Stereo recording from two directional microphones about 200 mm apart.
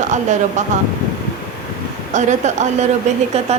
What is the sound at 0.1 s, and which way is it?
Speech, 35° right (ahead or behind).